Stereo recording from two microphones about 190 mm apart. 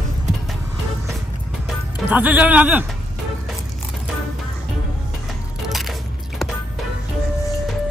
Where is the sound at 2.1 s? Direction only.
10° right (ahead or behind).